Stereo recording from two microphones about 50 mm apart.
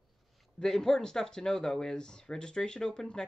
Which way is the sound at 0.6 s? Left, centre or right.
Centre.